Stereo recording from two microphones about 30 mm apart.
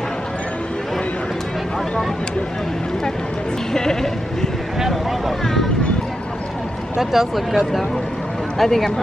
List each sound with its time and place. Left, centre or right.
3.7 s speech: centre
5.4 s vehicle: centre
7.0 s speech: centre
8.5 s speech: centre